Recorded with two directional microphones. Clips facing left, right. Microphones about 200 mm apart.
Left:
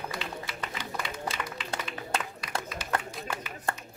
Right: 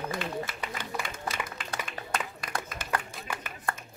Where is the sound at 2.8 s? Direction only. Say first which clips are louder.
Even; 50° right (ahead or behind).